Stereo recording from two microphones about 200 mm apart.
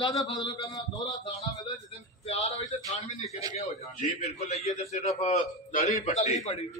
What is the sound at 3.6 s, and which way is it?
A man's voice, 35° left (ahead or behind).